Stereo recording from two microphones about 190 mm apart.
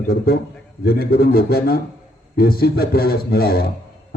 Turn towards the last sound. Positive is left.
turn(degrees=55)  # may be behind; listen again after turning